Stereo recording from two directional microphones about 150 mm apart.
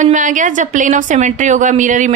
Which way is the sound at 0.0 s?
60° right (ahead or behind).